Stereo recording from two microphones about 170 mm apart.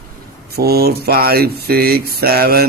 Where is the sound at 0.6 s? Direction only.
65° right (ahead or behind).